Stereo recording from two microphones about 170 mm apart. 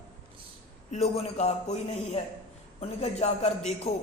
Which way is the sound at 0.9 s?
35° left (ahead or behind).